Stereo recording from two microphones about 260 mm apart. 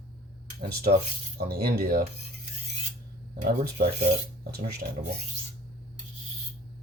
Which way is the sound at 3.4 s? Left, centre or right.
Right.